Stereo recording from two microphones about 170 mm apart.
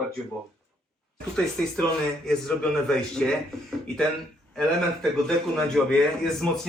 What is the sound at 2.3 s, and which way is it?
Speech, 5° left (ahead or behind).